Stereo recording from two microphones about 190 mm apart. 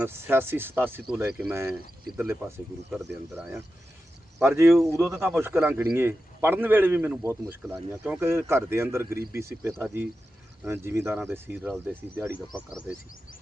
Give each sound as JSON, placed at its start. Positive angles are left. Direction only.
{"t": 0.0, "sound": "a man's voice", "side_deg": -10}
{"t": 12.5, "sound": "speech", "side_deg": 25}